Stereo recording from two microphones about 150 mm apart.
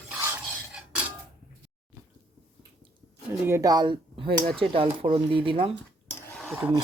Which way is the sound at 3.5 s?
20° right (ahead or behind).